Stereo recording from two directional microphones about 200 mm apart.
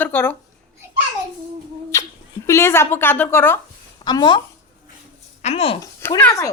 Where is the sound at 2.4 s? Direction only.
15° left (ahead or behind).